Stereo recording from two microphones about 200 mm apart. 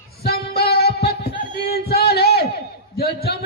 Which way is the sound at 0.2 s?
50° left (ahead or behind).